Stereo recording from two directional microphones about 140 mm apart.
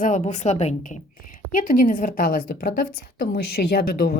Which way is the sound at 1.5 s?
75° left (ahead or behind).